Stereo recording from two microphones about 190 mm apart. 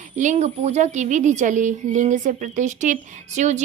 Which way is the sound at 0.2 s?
40° right (ahead or behind).